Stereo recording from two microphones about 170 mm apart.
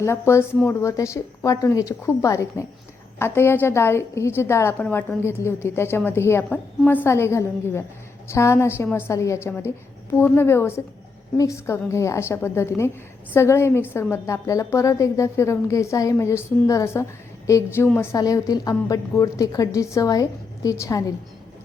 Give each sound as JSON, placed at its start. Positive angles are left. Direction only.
{"t": 0.0, "sound": "a woman's voice", "side_deg": 15}